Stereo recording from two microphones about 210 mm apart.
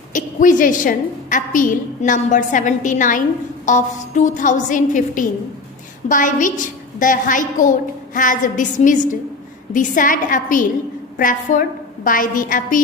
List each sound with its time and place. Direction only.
0.1 s a woman's voice: 40° left (ahead or behind)